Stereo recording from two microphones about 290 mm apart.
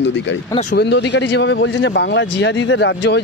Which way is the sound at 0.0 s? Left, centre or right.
Left.